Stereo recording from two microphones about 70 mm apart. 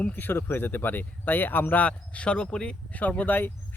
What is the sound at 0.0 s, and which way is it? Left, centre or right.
Speech, left.